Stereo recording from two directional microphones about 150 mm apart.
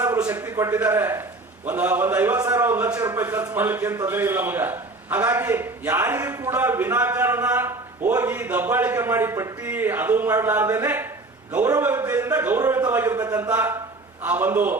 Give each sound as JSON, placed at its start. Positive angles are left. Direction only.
{"t": 0.0, "sound": "a man's voice", "side_deg": -10}